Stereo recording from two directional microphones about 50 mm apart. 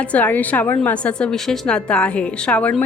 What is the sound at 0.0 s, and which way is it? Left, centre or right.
A woman's voice, left.